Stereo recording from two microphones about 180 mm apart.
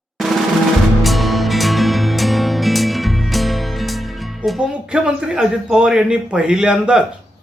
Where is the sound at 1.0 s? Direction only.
Centre (ahead or behind).